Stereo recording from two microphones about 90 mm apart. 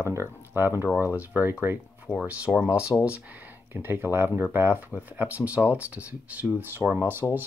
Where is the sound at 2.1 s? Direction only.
20° left (ahead or behind).